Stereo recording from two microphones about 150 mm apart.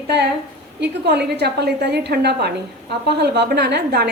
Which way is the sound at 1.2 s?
90° right.